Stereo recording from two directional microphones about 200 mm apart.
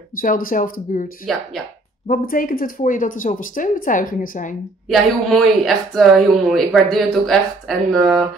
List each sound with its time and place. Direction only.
0.2 s speech: 45° left (ahead or behind)
4.8 s speech: centre (ahead or behind)